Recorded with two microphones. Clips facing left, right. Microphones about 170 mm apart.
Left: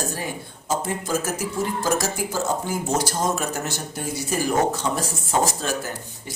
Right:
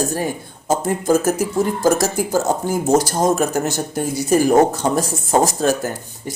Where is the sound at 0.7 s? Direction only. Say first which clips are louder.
Right 8 dB; 45° right (ahead or behind).